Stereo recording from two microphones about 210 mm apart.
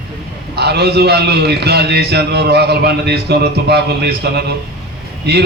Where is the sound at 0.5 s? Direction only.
50° right (ahead or behind).